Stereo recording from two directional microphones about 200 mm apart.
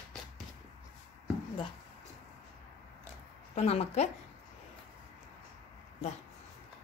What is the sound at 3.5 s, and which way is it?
Speech, 35° left (ahead or behind).